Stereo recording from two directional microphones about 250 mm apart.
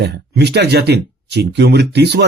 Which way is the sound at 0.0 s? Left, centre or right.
Right.